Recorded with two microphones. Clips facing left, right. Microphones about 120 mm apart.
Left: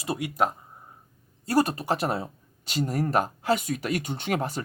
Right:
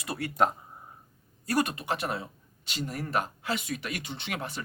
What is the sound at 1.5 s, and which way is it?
Speech, 35° left (ahead or behind).